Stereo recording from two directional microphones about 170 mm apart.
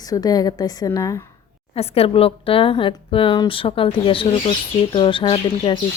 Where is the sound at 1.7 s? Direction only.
35° left (ahead or behind).